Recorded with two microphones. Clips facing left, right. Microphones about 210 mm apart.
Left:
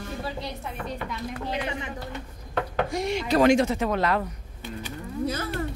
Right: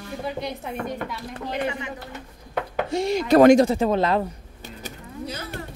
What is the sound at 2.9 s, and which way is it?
Speech, 30° right (ahead or behind).